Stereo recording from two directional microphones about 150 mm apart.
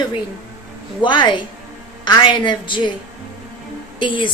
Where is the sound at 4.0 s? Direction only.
35° left (ahead or behind).